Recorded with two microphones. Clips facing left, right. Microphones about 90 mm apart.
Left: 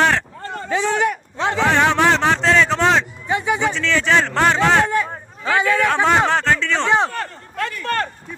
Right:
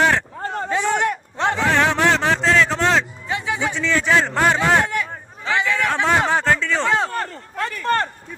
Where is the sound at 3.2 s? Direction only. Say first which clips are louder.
Left 4 dB; 25° left (ahead or behind).